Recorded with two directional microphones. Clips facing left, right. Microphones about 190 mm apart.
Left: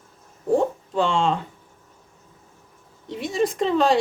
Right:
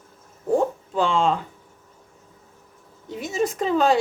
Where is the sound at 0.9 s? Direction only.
Centre (ahead or behind).